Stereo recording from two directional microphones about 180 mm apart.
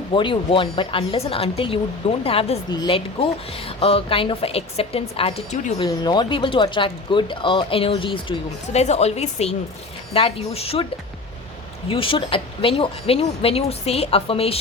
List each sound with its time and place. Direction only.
0.1 s speech: 30° left (ahead or behind)
5.8 s speech: 25° left (ahead or behind)
11.9 s speech: 30° left (ahead or behind)